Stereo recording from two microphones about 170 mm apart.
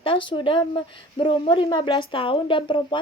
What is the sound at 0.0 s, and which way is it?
A woman's voice, 30° left (ahead or behind).